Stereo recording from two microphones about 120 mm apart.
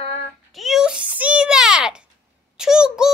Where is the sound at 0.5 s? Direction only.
Centre (ahead or behind).